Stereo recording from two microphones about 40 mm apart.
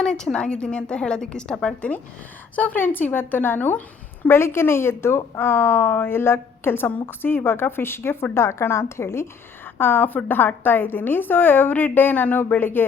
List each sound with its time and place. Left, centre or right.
0.0 s a woman's voice: left
2.7 s a woman's voice: left
4.3 s a woman's voice: left
6.1 s a woman's voice: left
9.7 s a woman's voice: left
12.5 s a woman's voice: left